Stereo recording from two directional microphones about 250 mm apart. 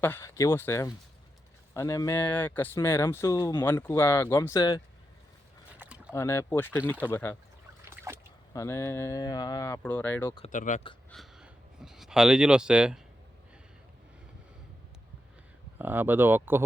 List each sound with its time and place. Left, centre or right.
0.0 s speech: centre
5.8 s a sound: centre
6.1 s speech: centre
7.9 s boat: centre
8.5 s speech: centre
10.3 s speech: left
11.1 s a sound: centre
15.8 s speech: centre